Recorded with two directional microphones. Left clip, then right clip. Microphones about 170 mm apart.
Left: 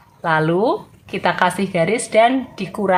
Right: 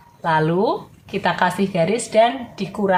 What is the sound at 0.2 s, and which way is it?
A woman's voice, 35° left (ahead or behind).